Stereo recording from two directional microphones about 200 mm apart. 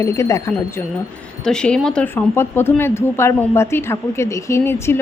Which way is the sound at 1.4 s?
5° left (ahead or behind).